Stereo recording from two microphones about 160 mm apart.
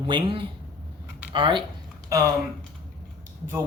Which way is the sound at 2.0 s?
20° right (ahead or behind).